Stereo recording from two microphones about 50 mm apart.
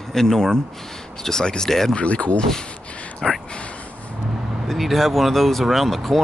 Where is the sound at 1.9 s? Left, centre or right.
Left.